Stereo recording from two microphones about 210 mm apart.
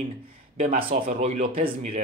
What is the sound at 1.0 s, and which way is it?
Speech, 35° right (ahead or behind).